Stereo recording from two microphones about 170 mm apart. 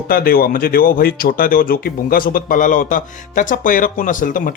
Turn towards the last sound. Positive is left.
turn(degrees=50)  # may be behind; listen again after turning